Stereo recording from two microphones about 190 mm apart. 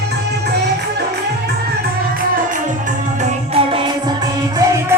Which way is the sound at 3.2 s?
30° right (ahead or behind).